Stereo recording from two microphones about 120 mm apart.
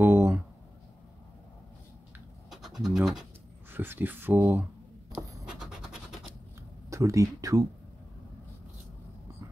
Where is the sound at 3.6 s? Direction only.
20° right (ahead or behind).